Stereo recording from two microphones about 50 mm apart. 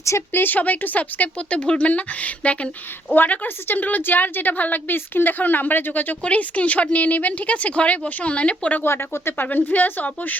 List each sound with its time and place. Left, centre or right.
0.3 s speech: left
3.2 s a woman's voice: left
8.8 s speech: left
9.5 s a woman's voice: left